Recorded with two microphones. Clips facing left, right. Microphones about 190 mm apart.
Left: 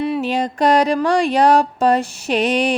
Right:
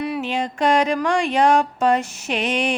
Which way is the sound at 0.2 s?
40° left (ahead or behind).